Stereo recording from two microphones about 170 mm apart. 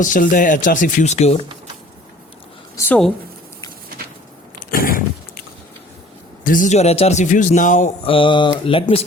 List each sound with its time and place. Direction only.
0.0 s a man's voice: 50° left (ahead or behind)
4.7 s a sound: 55° left (ahead or behind)
6.4 s a man's voice: 50° left (ahead or behind)
8.0 s mantra: 30° left (ahead or behind)